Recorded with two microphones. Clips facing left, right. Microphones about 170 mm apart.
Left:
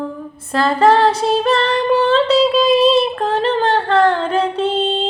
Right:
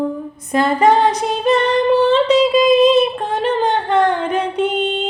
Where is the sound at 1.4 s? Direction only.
10° right (ahead or behind).